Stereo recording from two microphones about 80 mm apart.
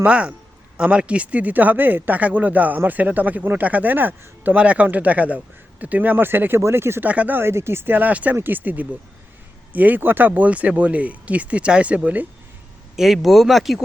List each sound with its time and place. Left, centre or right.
0.0 s speech: centre; by 7.1 s right
7.1 s speech: centre
13.0 s speech: centre